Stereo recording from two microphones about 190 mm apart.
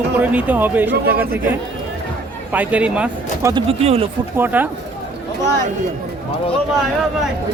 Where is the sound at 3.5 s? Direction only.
25° right (ahead or behind).